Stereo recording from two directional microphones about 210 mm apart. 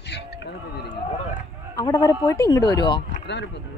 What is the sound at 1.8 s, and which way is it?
Speech, 15° left (ahead or behind).